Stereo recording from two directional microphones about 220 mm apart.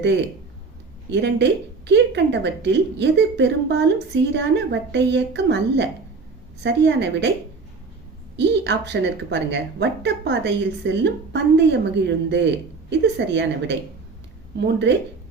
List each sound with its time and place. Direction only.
1.1 s a woman's voice: 50° right (ahead or behind)
8.4 s a woman's voice: 50° right (ahead or behind)